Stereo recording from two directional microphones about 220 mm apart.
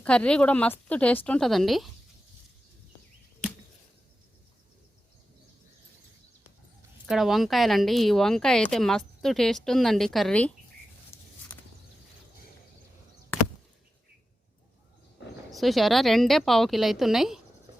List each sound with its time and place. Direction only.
0.0 s speech: 5° left (ahead or behind)
7.1 s speech: centre (ahead or behind)
11.1 s a sound: 10° left (ahead or behind)
15.4 s speech: centre (ahead or behind)